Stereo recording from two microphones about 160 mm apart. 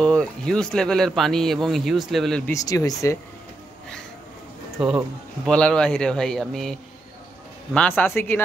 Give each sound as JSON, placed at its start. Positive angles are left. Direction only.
{"t": 0.0, "sound": "a man's voice", "side_deg": 5}
{"t": 2.5, "sound": "speech", "side_deg": 20}
{"t": 4.7, "sound": "a man's voice", "side_deg": -5}
{"t": 5.5, "sound": "a man's voice", "side_deg": 5}